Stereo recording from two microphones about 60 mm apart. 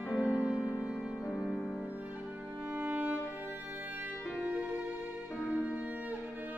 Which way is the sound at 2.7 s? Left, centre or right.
Right.